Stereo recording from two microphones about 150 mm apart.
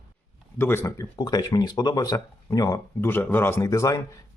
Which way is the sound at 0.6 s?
15° left (ahead or behind).